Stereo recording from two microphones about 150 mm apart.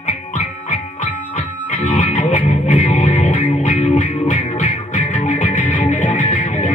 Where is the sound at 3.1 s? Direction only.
35° left (ahead or behind).